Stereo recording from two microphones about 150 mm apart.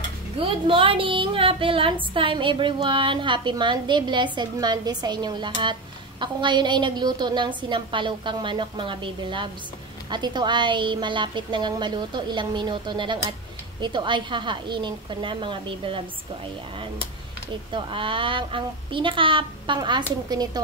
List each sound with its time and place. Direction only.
0.4 s a woman's voice: 35° right (ahead or behind)
17.7 s a woman's voice: 35° right (ahead or behind)